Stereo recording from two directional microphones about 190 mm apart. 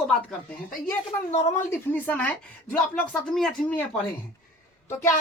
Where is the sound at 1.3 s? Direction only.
35° left (ahead or behind).